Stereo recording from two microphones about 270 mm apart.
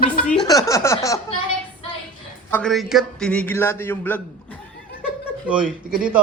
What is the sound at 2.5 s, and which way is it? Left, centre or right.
A man's voice, centre.